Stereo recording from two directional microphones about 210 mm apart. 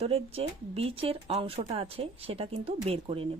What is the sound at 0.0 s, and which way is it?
Speech, 25° right (ahead or behind).